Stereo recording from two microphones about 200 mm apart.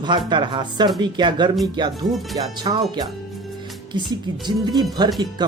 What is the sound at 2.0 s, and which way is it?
Speech, centre (ahead or behind).